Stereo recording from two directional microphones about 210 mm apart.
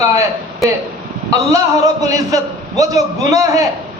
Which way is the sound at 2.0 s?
15° right (ahead or behind).